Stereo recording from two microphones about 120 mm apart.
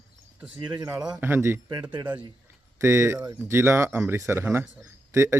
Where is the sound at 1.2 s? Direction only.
20° right (ahead or behind).